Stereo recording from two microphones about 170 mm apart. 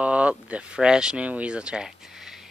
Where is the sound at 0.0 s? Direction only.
5° right (ahead or behind).